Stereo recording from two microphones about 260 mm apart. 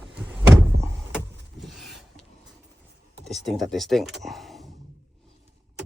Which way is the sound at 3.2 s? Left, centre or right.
Centre.